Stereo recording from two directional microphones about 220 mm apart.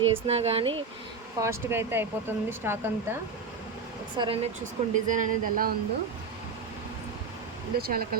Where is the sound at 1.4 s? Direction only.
10° right (ahead or behind).